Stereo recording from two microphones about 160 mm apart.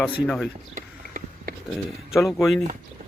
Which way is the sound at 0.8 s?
60° right (ahead or behind).